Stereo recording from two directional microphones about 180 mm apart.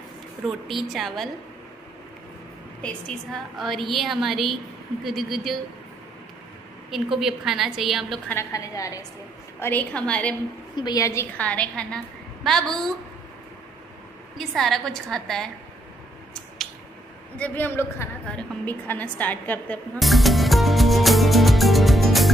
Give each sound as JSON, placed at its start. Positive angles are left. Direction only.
{"t": 0.5, "sound": "a woman's voice", "side_deg": 0}
{"t": 2.8, "sound": "a woman's voice", "side_deg": 5}
{"t": 6.9, "sound": "a woman's voice", "side_deg": 0}
{"t": 8.3, "sound": "a woman's voice", "side_deg": 15}
{"t": 10.8, "sound": "a woman's voice", "side_deg": 20}
{"t": 14.3, "sound": "a woman's voice", "side_deg": 0}
{"t": 17.4, "sound": "a woman's voice", "side_deg": 10}